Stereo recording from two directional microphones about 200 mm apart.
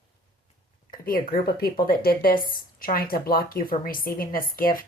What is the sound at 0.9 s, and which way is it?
Speech, 45° left (ahead or behind).